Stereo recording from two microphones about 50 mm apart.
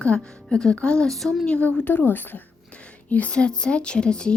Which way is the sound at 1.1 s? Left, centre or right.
Centre.